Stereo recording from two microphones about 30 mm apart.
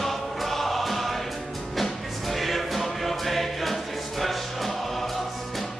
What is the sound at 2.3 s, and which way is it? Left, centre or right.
Music, centre.